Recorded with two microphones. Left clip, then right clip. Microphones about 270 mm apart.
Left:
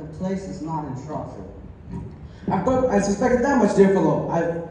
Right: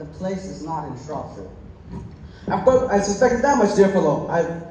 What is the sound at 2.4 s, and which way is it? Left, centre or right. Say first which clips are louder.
A man's voice: right 4 dB; centre.